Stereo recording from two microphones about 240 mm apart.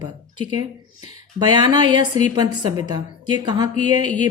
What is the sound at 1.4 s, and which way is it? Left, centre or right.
Speech, centre.